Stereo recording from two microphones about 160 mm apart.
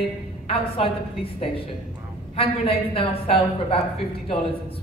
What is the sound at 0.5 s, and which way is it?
A woman's voice, 35° left (ahead or behind).